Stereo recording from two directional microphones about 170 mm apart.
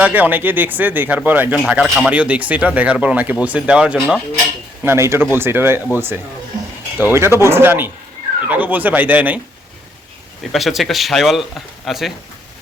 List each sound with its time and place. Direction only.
0.0 s speech: 10° right (ahead or behind)
4.8 s speech: 15° right (ahead or behind)
10.5 s speech: centre (ahead or behind)